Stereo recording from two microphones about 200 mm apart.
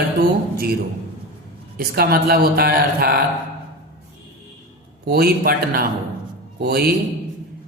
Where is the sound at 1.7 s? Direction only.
50° right (ahead or behind).